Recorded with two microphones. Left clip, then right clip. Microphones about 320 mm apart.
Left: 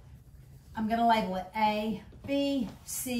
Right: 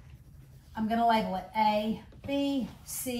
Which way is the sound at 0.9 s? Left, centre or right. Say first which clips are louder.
Even; centre.